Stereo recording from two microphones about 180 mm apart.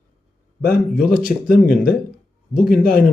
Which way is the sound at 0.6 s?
55° left (ahead or behind).